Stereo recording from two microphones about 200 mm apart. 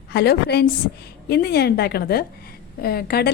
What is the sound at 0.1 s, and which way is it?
A woman's voice, 55° left (ahead or behind).